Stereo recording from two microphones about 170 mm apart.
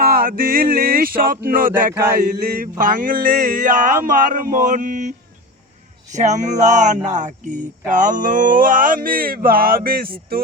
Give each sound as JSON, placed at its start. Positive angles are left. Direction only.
{"t": 0.0, "sound": "speech", "side_deg": -60}
{"t": 1.9, "sound": "chant", "side_deg": -15}
{"t": 2.4, "sound": "speech", "side_deg": -55}